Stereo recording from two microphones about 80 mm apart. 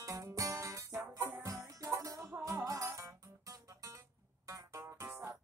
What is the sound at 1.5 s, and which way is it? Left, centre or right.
Music, right.